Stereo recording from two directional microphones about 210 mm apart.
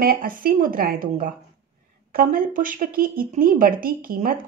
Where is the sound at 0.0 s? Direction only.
45° right (ahead or behind).